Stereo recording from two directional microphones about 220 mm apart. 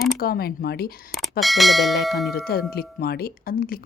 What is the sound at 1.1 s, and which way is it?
Speech, centre (ahead or behind).